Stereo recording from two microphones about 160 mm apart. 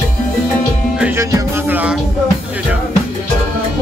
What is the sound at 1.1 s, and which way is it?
Music, 15° right (ahead or behind).